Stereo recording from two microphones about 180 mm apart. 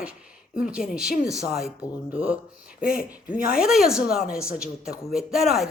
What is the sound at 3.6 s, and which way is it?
A man's voice, 5° right (ahead or behind).